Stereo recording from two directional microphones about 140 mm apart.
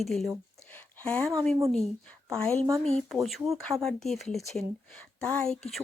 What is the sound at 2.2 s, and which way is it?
A woman's voice, 5° left (ahead or behind).